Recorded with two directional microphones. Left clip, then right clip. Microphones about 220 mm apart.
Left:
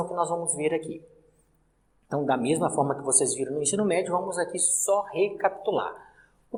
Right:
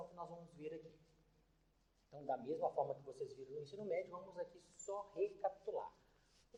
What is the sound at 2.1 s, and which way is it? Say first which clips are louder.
Speech: left 19 dB; 45° left (ahead or behind).